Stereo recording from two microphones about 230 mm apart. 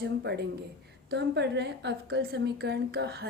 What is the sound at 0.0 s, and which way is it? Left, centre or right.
A woman's voice, right.